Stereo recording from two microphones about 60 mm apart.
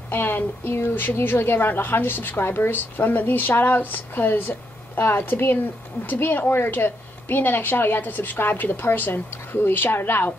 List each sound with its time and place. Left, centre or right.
0.1 s a woman's voice: left